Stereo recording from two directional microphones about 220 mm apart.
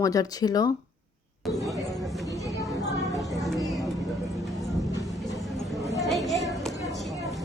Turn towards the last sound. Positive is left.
turn(degrees=0)  # may be behind; listen again after turning